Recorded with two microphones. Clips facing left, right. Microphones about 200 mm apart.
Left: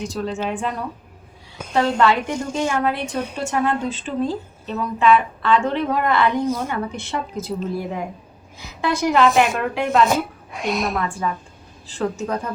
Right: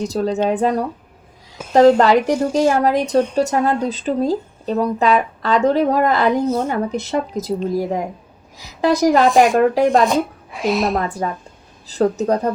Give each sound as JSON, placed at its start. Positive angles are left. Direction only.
{"t": 0.0, "sound": "a woman's voice", "side_deg": -40}
{"t": 10.1, "sound": "a woman's voice", "side_deg": 0}
{"t": 10.9, "sound": "a woman's voice", "side_deg": -40}